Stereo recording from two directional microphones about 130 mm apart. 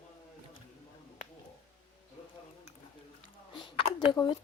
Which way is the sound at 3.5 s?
40° left (ahead or behind).